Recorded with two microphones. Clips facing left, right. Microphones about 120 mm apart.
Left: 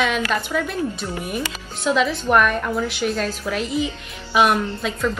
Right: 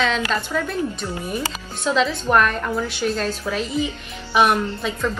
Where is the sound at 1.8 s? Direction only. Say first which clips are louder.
Left 1 dB; 10° left (ahead or behind).